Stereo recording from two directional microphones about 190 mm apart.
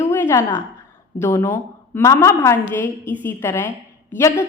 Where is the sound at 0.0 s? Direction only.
15° left (ahead or behind).